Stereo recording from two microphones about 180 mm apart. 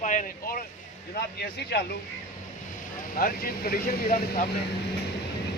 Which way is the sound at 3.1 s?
55° left (ahead or behind).